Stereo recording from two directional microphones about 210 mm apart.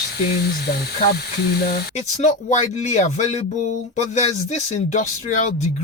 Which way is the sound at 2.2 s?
35° left (ahead or behind).